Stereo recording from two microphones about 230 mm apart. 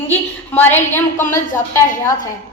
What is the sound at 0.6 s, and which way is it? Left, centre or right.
Speech, centre.